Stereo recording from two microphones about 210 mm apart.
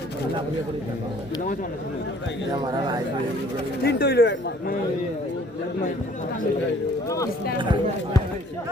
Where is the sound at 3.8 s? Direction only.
50° left (ahead or behind).